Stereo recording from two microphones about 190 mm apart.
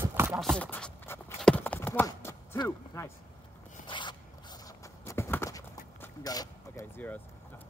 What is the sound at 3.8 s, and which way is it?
Zipper, 25° left (ahead or behind).